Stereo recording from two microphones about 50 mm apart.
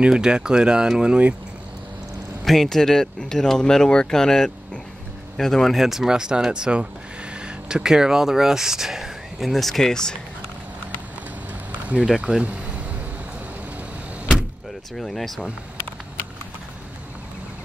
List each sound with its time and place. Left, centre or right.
0.0 s speech: centre
2.4 s speech: centre
12.2 s speech: centre
15.0 s speech: centre